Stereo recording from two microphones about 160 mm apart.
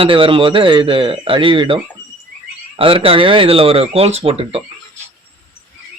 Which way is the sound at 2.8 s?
35° right (ahead or behind).